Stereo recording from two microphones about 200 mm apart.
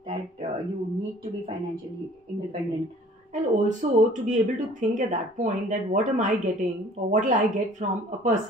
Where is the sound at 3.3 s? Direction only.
40° right (ahead or behind).